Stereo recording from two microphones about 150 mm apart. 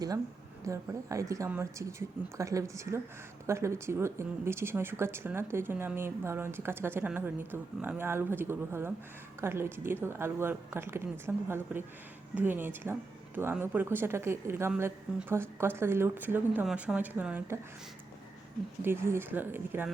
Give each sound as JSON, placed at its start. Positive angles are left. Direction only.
{"t": 0.6, "sound": "a woman's voice", "side_deg": -20}
{"t": 18.8, "sound": "speech", "side_deg": -15}